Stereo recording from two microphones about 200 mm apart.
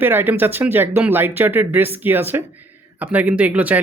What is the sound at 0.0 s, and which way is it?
Speech, 10° right (ahead or behind).